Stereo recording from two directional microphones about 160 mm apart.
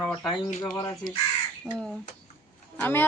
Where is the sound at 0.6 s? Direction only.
20° left (ahead or behind).